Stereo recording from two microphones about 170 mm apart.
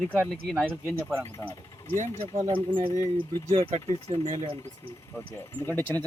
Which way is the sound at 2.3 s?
30° right (ahead or behind).